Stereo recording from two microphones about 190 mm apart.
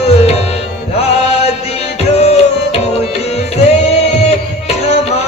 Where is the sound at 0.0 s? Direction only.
30° left (ahead or behind).